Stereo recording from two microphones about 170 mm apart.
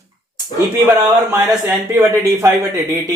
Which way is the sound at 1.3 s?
15° right (ahead or behind).